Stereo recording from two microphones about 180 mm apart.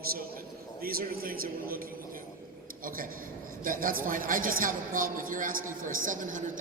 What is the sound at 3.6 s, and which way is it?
A man's voice, 50° right (ahead or behind).